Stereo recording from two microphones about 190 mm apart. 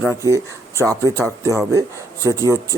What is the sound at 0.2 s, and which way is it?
Speech, 15° right (ahead or behind).